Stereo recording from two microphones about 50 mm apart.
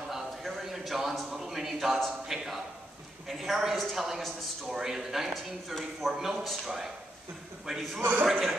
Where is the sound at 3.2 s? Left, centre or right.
Centre.